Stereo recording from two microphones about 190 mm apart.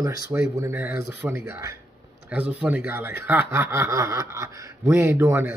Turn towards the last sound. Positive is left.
turn(degrees=-15)  # may be behind; listen again after turning